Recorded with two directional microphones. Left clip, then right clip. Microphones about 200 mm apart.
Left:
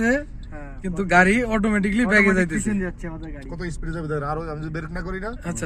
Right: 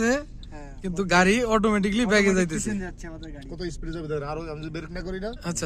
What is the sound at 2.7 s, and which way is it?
Speech, 15° left (ahead or behind).